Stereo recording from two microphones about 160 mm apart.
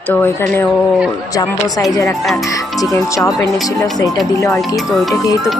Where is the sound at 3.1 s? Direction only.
20° left (ahead or behind).